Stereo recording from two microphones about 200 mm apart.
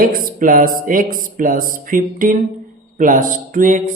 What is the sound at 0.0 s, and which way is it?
Speech, 45° right (ahead or behind).